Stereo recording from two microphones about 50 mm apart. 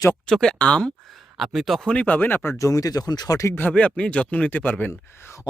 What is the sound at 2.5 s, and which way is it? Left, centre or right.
Speech, left.